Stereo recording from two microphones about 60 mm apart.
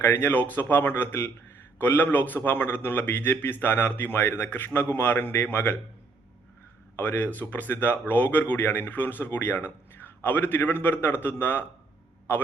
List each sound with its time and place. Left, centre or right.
0.0 s speech: left
6.9 s speech: left